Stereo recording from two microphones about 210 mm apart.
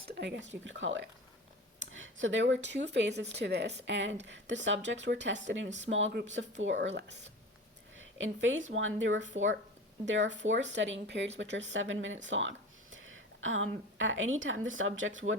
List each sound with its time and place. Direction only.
0.1 s speech: 55° right (ahead or behind)
7.9 s a woman's voice: 65° right (ahead or behind)